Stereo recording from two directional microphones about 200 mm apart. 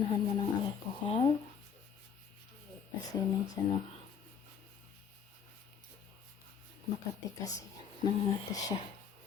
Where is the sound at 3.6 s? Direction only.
15° left (ahead or behind).